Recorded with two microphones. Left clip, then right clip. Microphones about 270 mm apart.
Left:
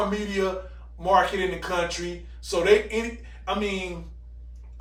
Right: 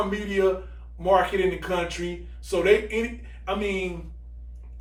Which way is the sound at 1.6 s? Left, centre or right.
Centre.